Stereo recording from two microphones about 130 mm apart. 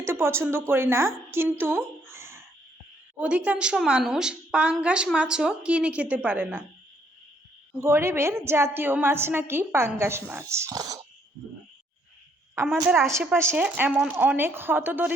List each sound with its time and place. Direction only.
0.0 s a woman's voice: 20° right (ahead or behind)
7.8 s a woman's voice: 20° right (ahead or behind)
13.0 s a woman's voice: 20° right (ahead or behind)